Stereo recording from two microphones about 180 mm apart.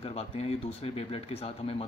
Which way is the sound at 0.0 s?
35° left (ahead or behind).